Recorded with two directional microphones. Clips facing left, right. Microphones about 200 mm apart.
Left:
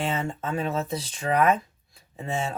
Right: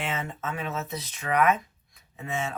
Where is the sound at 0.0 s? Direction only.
30° left (ahead or behind).